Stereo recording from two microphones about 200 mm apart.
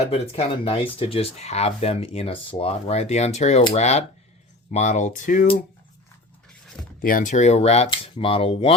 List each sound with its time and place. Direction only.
0.0 s speech: 30° left (ahead or behind)
7.0 s speech: 45° left (ahead or behind)